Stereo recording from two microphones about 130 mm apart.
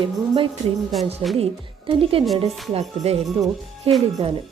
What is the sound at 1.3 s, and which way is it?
A woman's voice, 45° right (ahead or behind).